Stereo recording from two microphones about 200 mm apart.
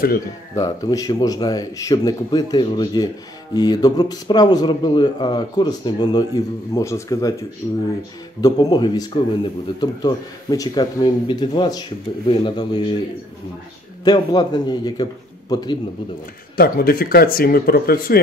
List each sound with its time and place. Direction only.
0.6 s speech: 15° left (ahead or behind)
8.4 s speech: 20° left (ahead or behind)
14.0 s speech: 20° left (ahead or behind)
16.5 s speech: 50° left (ahead or behind)